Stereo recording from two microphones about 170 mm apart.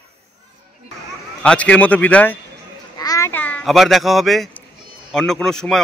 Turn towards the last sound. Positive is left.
turn(degrees=5)  # may be behind; listen again after turning